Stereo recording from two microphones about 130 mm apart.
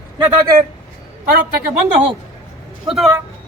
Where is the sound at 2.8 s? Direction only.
Centre (ahead or behind).